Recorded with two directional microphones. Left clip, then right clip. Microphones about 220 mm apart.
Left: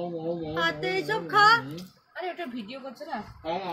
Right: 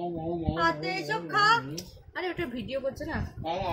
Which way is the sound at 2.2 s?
35° right (ahead or behind).